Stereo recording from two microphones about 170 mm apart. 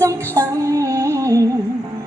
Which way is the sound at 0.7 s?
20° right (ahead or behind).